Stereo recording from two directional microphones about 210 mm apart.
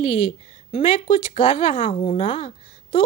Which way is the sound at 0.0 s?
25° left (ahead or behind).